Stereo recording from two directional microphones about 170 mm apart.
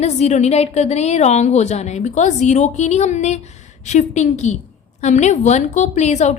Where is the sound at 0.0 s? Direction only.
40° left (ahead or behind).